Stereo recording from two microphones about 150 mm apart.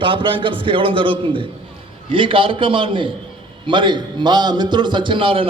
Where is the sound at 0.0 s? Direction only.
35° right (ahead or behind).